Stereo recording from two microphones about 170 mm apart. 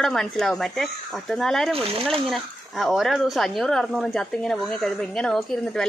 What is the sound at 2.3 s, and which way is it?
Speech, centre (ahead or behind).